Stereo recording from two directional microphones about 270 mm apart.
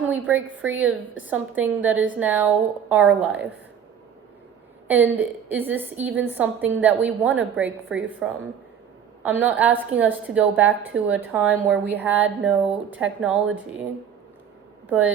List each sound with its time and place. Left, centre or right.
0.0 s a woman's voice: centre
4.9 s a woman's voice: centre
14.8 s speech: centre